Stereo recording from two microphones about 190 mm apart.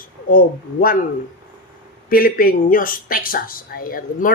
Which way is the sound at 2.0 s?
50° left (ahead or behind).